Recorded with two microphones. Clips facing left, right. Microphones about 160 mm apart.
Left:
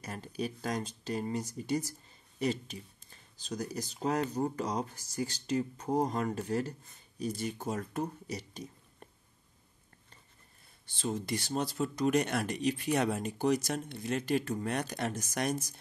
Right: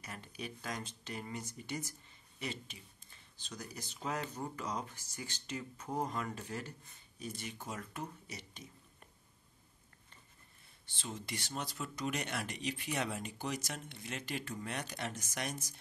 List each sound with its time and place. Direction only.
0.0 s speech: 35° left (ahead or behind)
11.0 s speech: 40° left (ahead or behind)